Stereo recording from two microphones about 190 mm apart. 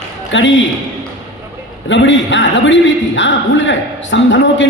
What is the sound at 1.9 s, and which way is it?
A man's voice, 75° left (ahead or behind).